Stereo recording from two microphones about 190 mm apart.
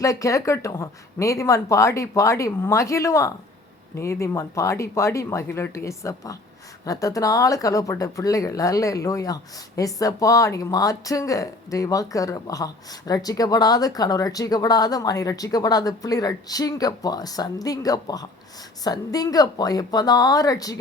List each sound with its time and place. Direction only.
0.0 s speech: 15° left (ahead or behind)